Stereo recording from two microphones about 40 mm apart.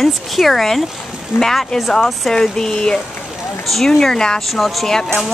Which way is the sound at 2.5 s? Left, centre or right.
Centre.